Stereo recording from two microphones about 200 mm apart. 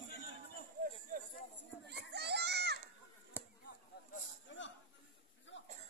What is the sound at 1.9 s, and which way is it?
Children playing, 55° right (ahead or behind).